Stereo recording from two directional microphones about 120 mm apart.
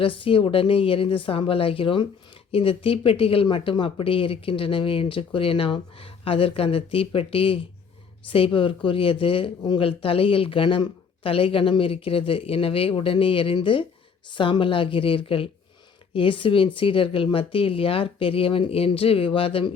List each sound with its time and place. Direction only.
0.0 s speech: 50° left (ahead or behind)